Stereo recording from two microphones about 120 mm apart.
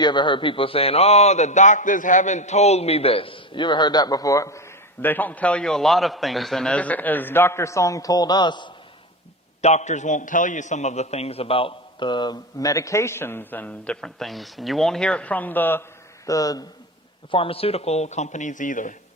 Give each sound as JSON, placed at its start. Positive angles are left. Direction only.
{"t": 0.0, "sound": "a man's voice", "side_deg": 40}
{"t": 5.0, "sound": "a man's voice", "side_deg": 15}
{"t": 9.6, "sound": "a man's voice", "side_deg": 70}
{"t": 16.2, "sound": "speech", "side_deg": 30}
{"t": 17.3, "sound": "speech", "side_deg": 50}